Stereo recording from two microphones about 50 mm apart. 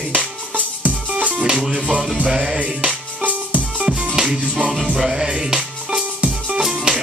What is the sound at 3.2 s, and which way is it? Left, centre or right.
Music, right.